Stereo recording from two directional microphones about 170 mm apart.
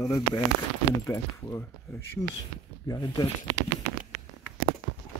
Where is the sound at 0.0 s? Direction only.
20° left (ahead or behind).